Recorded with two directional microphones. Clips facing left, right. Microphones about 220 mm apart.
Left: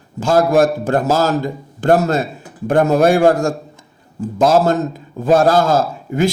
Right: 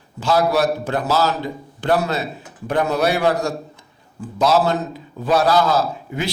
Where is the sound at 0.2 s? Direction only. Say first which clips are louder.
Left 5 dB; 50° left (ahead or behind).